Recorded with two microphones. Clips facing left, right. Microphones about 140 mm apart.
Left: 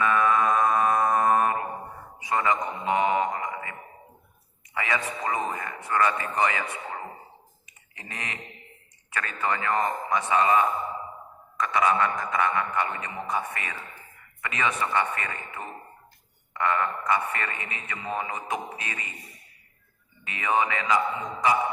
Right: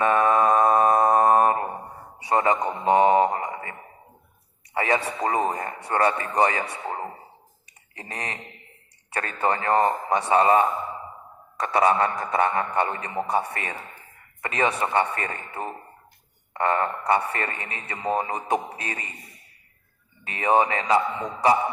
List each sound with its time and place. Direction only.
0.0 s mantra: 35° right (ahead or behind)
2.1 s a sound: 35° right (ahead or behind)
4.7 s speech: 35° right (ahead or behind)
7.9 s a sound: 35° right (ahead or behind)
9.0 s speech: 35° right (ahead or behind)
20.2 s speech: 35° right (ahead or behind)